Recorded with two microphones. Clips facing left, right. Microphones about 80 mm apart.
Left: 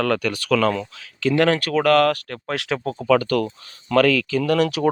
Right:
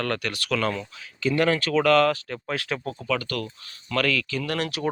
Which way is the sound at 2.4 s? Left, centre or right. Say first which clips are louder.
Left 5 dB; left.